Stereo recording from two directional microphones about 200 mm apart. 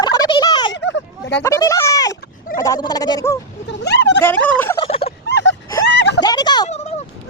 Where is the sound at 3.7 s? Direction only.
60° left (ahead or behind).